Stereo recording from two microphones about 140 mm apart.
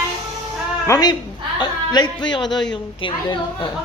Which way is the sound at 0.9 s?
30° left (ahead or behind).